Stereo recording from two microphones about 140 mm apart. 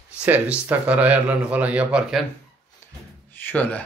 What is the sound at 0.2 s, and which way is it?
A man's voice, 10° right (ahead or behind).